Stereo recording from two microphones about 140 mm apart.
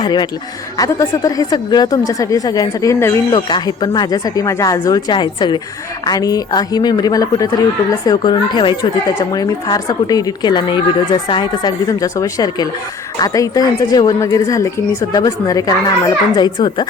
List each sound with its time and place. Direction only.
0.0 s speech: 30° left (ahead or behind)
3.3 s speech: 35° left (ahead or behind)